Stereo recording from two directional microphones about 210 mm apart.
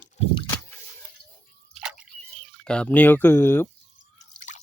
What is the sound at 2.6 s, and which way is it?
Speech, 5° left (ahead or behind).